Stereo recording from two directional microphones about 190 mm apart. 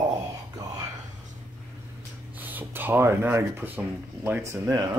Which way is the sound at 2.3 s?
10° right (ahead or behind).